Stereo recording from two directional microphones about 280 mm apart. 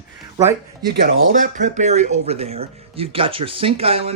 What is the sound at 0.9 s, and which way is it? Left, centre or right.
Speech, right.